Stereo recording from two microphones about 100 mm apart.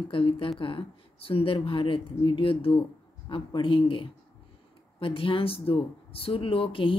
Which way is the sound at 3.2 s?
55° left (ahead or behind).